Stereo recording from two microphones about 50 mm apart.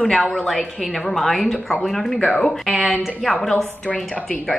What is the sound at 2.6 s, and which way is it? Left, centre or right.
Speech, centre.